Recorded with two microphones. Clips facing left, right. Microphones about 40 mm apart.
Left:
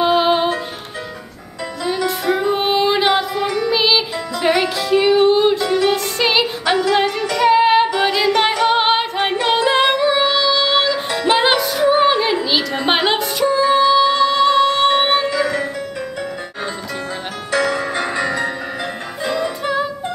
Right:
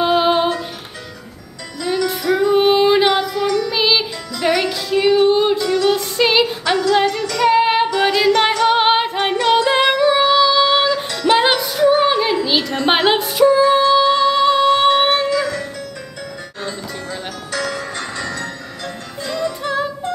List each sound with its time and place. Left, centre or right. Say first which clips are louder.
0.0 s music: even; centre
2.2 s music: right 2 dB; centre
2.5 s music: right 4 dB; centre
3.3 s music: right 1 dB; centre
3.7 s music: left 1 dB; centre
5.9 s female singing: right 1 dB; centre
7.9 s music: right 1 dB; centre
9.2 s singing: right 2 dB; centre
9.7 s music: right 1 dB; centre
11.8 s music: right 1 dB; centre
17.5 s music: left 6 dB; centre
19.6 s music: even; centre